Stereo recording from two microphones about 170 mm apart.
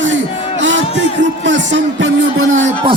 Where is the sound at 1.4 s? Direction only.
90° right.